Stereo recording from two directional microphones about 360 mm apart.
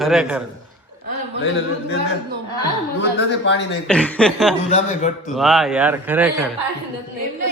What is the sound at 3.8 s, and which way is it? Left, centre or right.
Speech, centre.